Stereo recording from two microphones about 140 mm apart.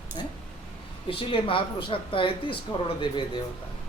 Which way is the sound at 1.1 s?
40° left (ahead or behind).